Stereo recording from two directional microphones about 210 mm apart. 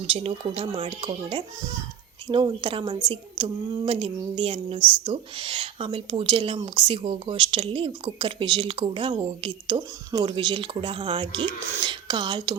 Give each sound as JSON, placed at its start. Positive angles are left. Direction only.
{"t": 0.1, "sound": "speech", "side_deg": -25}